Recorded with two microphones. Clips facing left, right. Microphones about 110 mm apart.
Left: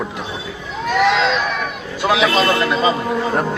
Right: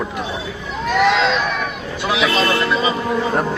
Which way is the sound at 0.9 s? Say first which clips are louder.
Even; centre (ahead or behind).